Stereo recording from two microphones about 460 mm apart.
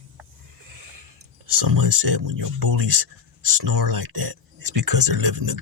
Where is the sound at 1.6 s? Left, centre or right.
Right.